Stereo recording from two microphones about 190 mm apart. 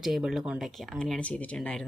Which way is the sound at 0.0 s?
Centre (ahead or behind).